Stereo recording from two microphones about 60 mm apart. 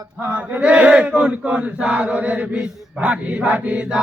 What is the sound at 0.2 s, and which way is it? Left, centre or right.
Chant, right.